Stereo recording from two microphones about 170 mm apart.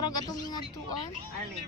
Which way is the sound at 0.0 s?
25° left (ahead or behind).